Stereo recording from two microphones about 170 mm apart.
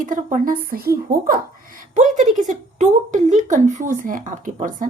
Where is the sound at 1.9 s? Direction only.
45° right (ahead or behind).